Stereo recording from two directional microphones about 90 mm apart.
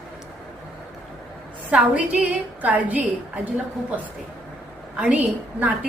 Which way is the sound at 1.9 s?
15° right (ahead or behind).